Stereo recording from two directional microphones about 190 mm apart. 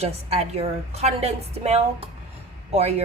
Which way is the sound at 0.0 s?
35° right (ahead or behind).